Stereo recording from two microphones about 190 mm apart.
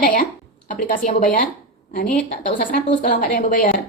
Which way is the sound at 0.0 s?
45° left (ahead or behind).